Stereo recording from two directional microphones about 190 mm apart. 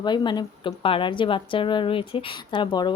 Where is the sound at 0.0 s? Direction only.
20° left (ahead or behind).